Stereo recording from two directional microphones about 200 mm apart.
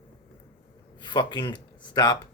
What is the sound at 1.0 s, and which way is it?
Speech, 20° left (ahead or behind).